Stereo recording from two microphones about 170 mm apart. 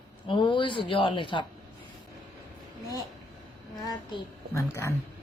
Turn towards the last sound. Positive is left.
turn(degrees=15)  # may be behind; listen again after turning